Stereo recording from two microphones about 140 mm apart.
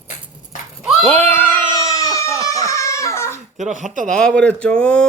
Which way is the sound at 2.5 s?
25° left (ahead or behind).